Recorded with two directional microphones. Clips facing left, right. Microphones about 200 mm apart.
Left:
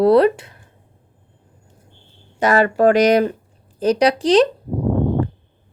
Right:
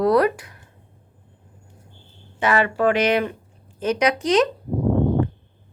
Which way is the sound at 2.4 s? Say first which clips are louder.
Left 5 dB; 40° left (ahead or behind).